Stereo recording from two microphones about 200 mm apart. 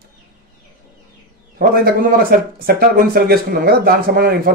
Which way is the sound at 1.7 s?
45° right (ahead or behind).